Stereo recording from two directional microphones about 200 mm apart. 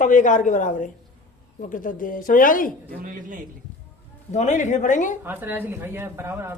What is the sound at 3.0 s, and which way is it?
Speech, 45° right (ahead or behind).